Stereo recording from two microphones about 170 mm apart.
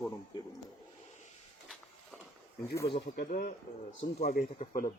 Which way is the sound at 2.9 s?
75° left (ahead or behind).